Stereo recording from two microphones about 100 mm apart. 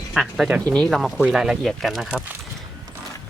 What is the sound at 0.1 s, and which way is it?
Speech, centre (ahead or behind).